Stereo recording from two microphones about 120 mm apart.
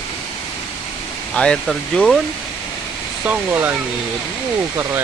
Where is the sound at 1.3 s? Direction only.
10° left (ahead or behind).